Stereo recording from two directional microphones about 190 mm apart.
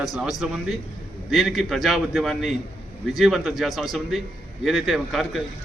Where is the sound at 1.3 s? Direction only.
Centre (ahead or behind).